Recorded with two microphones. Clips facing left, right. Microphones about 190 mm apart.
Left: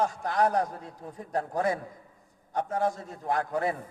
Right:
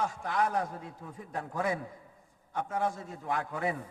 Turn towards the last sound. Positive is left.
turn(degrees=40)  # may be behind; listen again after turning